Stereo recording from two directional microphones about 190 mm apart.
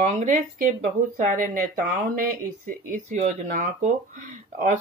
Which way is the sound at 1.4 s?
45° right (ahead or behind).